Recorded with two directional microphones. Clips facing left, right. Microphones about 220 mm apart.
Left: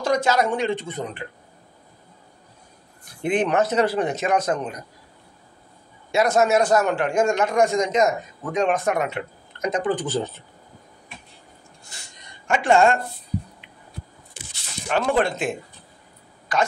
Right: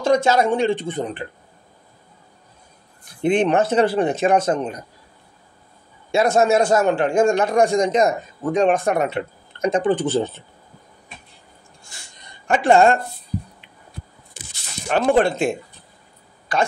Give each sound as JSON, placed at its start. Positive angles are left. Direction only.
{"t": 0.0, "sound": "a man's voice", "side_deg": -25}
{"t": 3.2, "sound": "a man's voice", "side_deg": -25}
{"t": 6.1, "sound": "a man's voice", "side_deg": -30}
{"t": 12.4, "sound": "a woman's voice", "side_deg": -35}
{"t": 14.3, "sound": "squish", "side_deg": -45}
{"t": 15.0, "sound": "a woman's voice", "side_deg": -30}